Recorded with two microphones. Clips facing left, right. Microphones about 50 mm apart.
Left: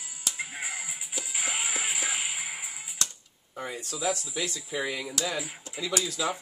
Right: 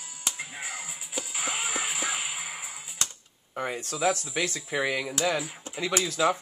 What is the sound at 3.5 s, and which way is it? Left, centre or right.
Speech, right.